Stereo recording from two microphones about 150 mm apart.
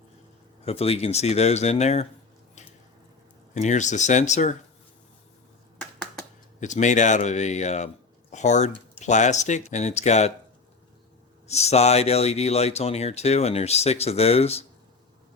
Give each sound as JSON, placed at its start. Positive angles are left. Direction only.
{"t": 0.6, "sound": "speech", "side_deg": 40}
{"t": 3.5, "sound": "speech", "side_deg": 55}
{"t": 5.8, "sound": "a sound", "side_deg": 5}
{"t": 6.6, "sound": "speech", "side_deg": 55}
{"t": 11.4, "sound": "speech", "side_deg": 45}